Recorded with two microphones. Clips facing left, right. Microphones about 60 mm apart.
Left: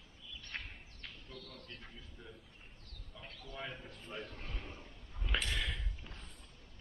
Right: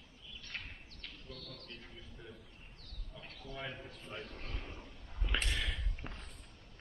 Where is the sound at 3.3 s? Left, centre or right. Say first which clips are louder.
Right 2 dB; right.